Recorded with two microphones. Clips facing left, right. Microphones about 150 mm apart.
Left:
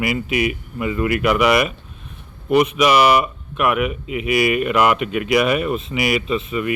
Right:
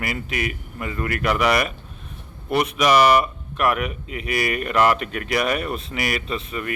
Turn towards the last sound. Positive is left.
turn(degrees=5)  # may be behind; listen again after turning